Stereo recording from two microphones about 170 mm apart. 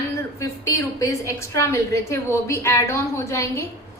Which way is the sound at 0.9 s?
15° left (ahead or behind).